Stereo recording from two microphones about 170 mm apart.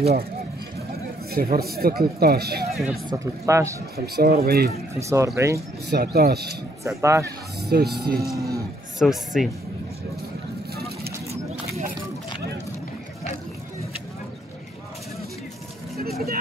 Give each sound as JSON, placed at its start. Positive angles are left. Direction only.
{"t": 0.0, "sound": "speech", "side_deg": -65}
{"t": 1.3, "sound": "speech", "side_deg": -60}
{"t": 2.7, "sound": "speech", "side_deg": 0}
{"t": 3.1, "sound": "speech", "side_deg": -15}
{"t": 3.9, "sound": "speech", "side_deg": -65}
{"t": 5.0, "sound": "speech", "side_deg": -15}
{"t": 5.9, "sound": "speech", "side_deg": -65}
{"t": 7.0, "sound": "speech", "side_deg": -15}
{"t": 7.2, "sound": "speech", "side_deg": -70}
{"t": 8.4, "sound": "a man's voice", "side_deg": -20}
{"t": 9.0, "sound": "speech", "side_deg": 0}